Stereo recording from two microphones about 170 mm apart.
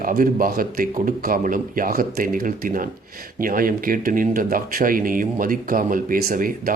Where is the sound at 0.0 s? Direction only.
55° right (ahead or behind).